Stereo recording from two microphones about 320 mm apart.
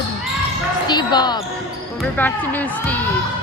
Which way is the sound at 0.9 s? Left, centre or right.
Centre.